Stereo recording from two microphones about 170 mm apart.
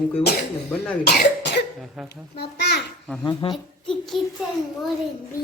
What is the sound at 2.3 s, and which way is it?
Speech, 75° left (ahead or behind).